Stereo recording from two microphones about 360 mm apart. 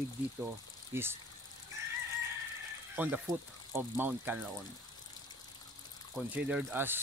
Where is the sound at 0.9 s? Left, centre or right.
Centre.